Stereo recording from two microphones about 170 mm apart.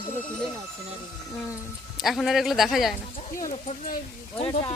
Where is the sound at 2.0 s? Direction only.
Centre (ahead or behind).